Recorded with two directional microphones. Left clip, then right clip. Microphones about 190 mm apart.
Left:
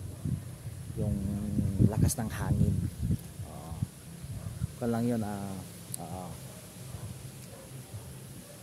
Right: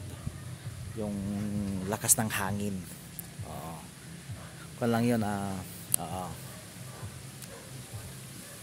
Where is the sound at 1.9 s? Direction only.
15° right (ahead or behind).